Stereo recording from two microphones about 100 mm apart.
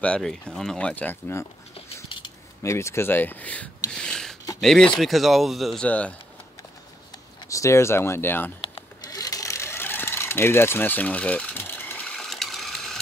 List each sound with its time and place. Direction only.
0.0 s speech: 10° left (ahead or behind)
2.6 s speech: 30° left (ahead or behind)
3.9 s a sound: 10° left (ahead or behind)
4.6 s speech: 5° left (ahead or behind)
5.9 s speech: 15° left (ahead or behind)
7.4 s speech: 30° left (ahead or behind)
9.0 s mechanisms: 40° left (ahead or behind); by 13.0 s 5° left (ahead or behind)